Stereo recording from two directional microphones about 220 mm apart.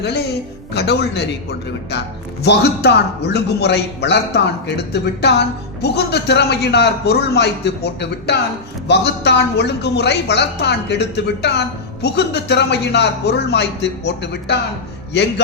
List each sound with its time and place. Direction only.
0.7 s a man's voice: 50° left (ahead or behind)